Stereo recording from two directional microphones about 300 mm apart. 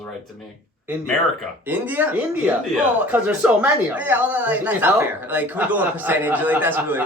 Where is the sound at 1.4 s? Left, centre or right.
Centre.